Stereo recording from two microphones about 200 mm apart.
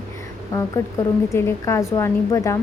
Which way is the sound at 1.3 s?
15° left (ahead or behind).